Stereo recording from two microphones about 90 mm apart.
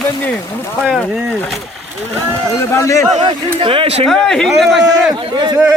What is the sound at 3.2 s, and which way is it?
Speech, 80° right.